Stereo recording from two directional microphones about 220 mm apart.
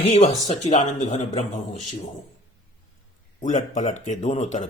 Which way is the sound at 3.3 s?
35° left (ahead or behind).